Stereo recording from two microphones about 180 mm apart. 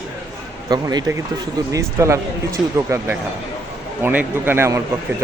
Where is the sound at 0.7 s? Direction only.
20° right (ahead or behind).